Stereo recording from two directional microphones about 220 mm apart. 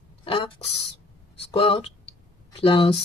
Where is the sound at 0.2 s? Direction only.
25° left (ahead or behind).